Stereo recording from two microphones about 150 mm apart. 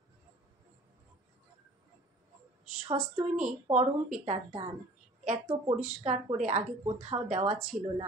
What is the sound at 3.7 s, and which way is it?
Speech, 50° right (ahead or behind).